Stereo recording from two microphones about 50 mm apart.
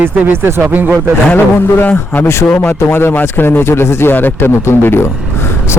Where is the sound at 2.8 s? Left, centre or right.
Left.